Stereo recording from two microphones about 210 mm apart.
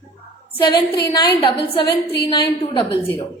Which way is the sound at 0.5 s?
25° left (ahead or behind).